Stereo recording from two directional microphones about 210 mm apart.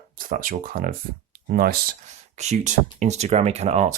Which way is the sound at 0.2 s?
40° right (ahead or behind).